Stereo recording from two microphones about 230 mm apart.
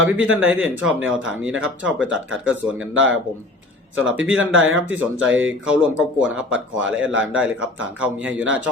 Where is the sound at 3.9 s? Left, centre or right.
Centre.